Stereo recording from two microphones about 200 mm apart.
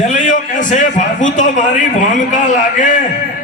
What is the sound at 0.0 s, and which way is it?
A man's voice, 40° left (ahead or behind).